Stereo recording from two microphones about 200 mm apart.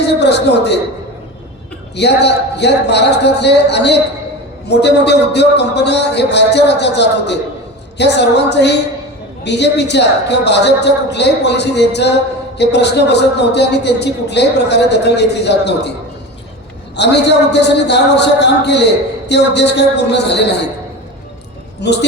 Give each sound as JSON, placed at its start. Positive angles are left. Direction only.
{"t": 0.0, "sound": "a sound", "side_deg": 55}
{"t": 2.0, "sound": "a woman's voice", "side_deg": 55}
{"t": 17.0, "sound": "a woman's voice", "side_deg": 60}
{"t": 21.8, "sound": "a woman's voice", "side_deg": 55}